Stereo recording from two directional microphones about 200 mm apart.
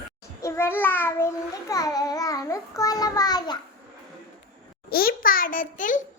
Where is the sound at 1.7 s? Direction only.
20° left (ahead or behind).